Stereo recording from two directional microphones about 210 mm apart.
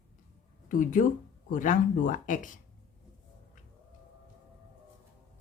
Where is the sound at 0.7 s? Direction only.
40° left (ahead or behind).